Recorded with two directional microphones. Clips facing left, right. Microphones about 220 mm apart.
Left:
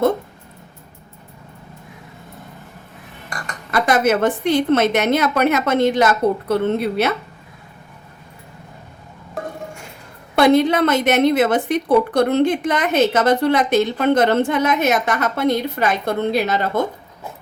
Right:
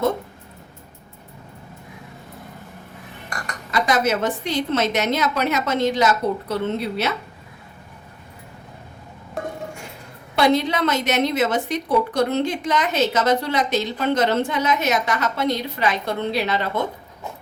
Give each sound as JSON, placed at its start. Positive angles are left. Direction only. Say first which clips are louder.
{"t": 3.7, "sound": "a woman's voice", "louder": "left 4 dB", "side_deg": 55}
{"t": 10.3, "sound": "a woman's voice", "louder": "left 5 dB", "side_deg": 55}